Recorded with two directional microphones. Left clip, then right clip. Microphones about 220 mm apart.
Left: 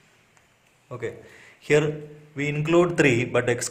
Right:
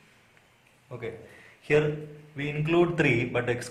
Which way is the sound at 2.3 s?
45° left (ahead or behind).